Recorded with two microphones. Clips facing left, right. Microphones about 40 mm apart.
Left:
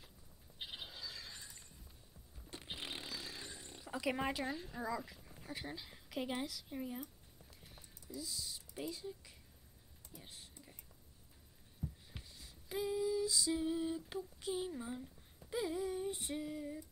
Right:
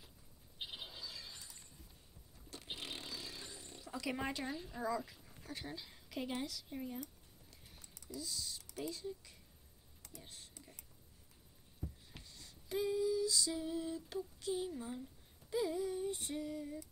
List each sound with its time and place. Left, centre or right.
0.6 s a sound: centre
2.5 s a sound: centre
3.3 s wild animals: centre
4.2 s speech: centre
7.6 s typing: centre
8.9 s speech: centre
12.1 s female singing: centre
13.6 s speech: centre